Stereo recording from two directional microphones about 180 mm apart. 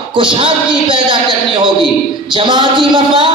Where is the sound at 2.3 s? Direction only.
25° right (ahead or behind).